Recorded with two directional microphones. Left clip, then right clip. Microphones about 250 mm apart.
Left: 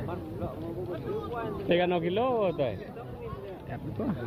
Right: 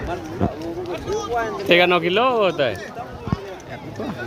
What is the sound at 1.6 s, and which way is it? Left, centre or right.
Speech, right.